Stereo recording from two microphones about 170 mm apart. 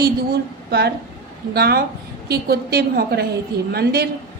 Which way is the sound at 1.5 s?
65° right (ahead or behind).